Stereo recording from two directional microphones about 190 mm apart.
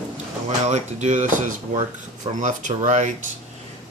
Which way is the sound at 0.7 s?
40° right (ahead or behind).